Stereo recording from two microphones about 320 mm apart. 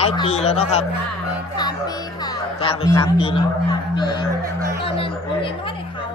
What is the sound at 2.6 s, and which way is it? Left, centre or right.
A woman's voice, centre.